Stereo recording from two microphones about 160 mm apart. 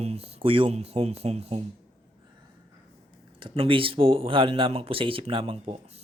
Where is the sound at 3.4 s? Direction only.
35° right (ahead or behind).